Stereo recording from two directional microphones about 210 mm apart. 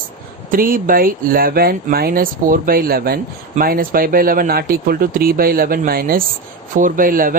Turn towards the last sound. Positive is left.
turn(degrees=-40)  # may be behind; listen again after turning